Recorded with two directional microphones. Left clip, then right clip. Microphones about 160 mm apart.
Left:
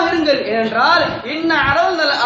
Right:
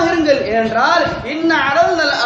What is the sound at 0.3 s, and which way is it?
A woman's voice, 5° right (ahead or behind).